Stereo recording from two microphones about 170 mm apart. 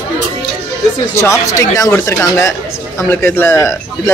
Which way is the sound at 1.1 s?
15° left (ahead or behind).